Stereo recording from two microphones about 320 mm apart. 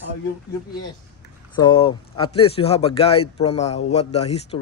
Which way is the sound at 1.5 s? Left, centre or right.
Centre.